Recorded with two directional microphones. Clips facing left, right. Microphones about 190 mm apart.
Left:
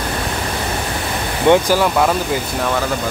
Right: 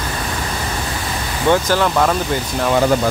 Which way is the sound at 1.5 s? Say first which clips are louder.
Left 3 dB; 10° left (ahead or behind).